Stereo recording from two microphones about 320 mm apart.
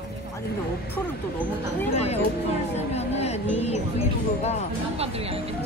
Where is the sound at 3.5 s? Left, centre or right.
Centre.